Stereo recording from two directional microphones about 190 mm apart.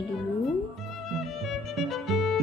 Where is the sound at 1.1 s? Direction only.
Centre (ahead or behind).